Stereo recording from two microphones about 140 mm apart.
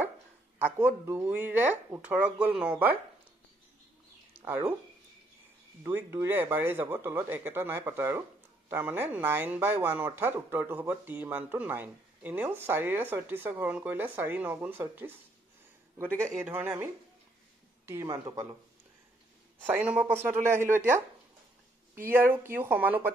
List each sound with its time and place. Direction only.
0.8 s speech: 10° right (ahead or behind)
4.4 s speech: 15° right (ahead or behind)
5.9 s speech: 15° right (ahead or behind)
16.3 s speech: 15° right (ahead or behind)
19.6 s speech: 10° right (ahead or behind)
22.0 s speech: 15° right (ahead or behind)